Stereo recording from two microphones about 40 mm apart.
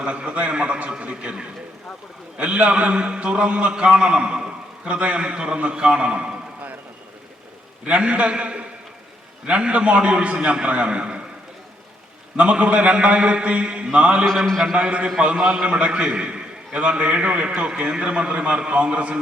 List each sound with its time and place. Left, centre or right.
0.0 s a man's voice: right
7.9 s a man's voice: right
12.4 s a man's voice: right
17.7 s a man's voice: right